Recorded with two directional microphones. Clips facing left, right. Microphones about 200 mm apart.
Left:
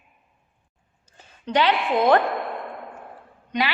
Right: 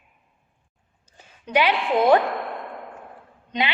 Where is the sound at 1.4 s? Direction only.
10° right (ahead or behind).